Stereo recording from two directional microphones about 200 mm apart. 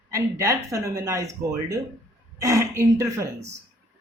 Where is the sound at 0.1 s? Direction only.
15° right (ahead or behind).